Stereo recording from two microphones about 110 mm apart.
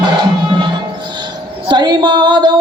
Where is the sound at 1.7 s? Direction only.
40° right (ahead or behind).